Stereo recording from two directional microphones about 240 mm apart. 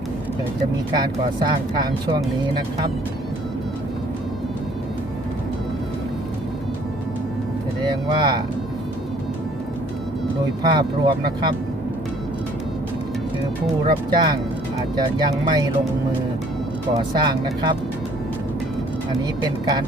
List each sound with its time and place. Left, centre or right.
0.9 s speech: centre
8.1 s speech: centre
10.6 s speech: centre
13.8 s speech: centre
17.0 s speech: centre
19.4 s speech: centre